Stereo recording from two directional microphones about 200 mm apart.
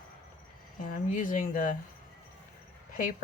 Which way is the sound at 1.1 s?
40° left (ahead or behind).